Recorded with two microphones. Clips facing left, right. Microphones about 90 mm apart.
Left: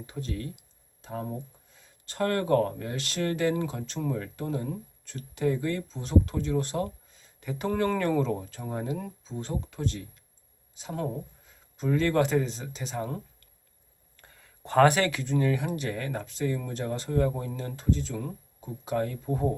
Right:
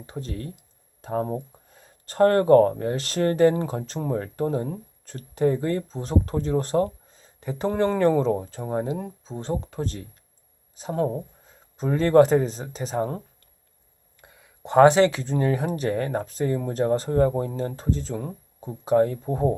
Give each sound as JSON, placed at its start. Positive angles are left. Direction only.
{"t": 0.0, "sound": "speech", "side_deg": -35}
{"t": 1.0, "sound": "speech", "side_deg": -45}
{"t": 14.2, "sound": "speech", "side_deg": -15}